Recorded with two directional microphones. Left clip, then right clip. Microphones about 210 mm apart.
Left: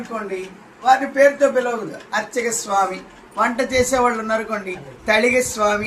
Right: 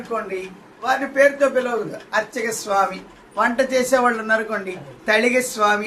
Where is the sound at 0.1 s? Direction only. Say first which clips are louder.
Right 2 dB; 20° right (ahead or behind).